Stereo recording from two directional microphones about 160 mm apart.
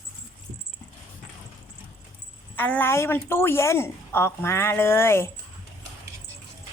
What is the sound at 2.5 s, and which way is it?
A woman's voice, 10° left (ahead or behind).